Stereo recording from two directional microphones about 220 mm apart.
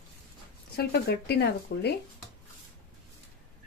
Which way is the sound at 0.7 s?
45° left (ahead or behind).